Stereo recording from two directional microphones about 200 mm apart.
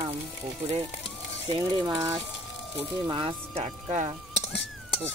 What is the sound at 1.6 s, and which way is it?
Speech, 15° right (ahead or behind).